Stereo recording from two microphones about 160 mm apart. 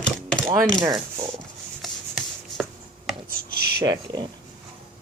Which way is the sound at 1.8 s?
Centre (ahead or behind).